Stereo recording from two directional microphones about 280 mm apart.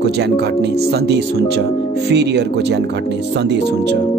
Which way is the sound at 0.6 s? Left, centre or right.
Right.